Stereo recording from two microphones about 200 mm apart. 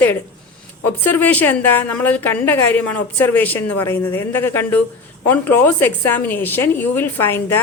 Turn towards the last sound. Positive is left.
turn(degrees=10)  # may be behind; listen again after turning